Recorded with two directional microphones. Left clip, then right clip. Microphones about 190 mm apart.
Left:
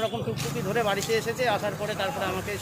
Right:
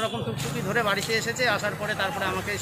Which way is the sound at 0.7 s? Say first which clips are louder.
Right 1 dB; 5° left (ahead or behind).